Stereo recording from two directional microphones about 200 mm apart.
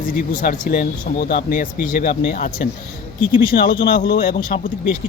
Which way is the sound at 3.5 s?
55° left (ahead or behind).